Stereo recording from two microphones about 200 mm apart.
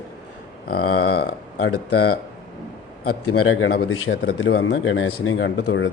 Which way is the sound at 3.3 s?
90° left.